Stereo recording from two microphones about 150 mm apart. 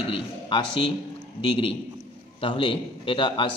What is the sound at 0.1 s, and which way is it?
A man's voice, 35° left (ahead or behind).